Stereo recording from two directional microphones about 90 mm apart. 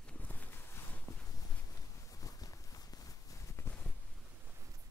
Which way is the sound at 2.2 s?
40° left (ahead or behind).